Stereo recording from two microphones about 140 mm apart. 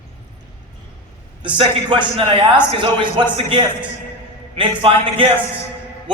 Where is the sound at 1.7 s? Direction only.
35° right (ahead or behind).